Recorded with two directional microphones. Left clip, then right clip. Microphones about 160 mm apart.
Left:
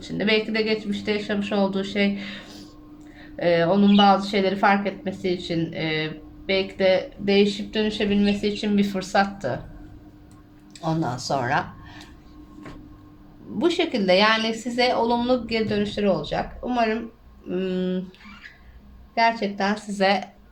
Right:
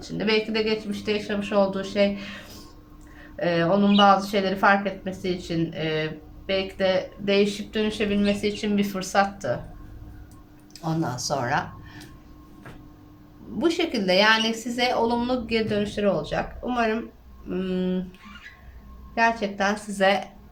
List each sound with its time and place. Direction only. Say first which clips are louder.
0.0 s speech: left 2 dB; 25° left (ahead or behind)
3.3 s speech: left 2 dB; 25° left (ahead or behind)
10.8 s speech: left 2 dB; 25° left (ahead or behind)
13.6 s speech: left 2 dB; 25° left (ahead or behind)
19.1 s speech: left 1 dB; 25° left (ahead or behind)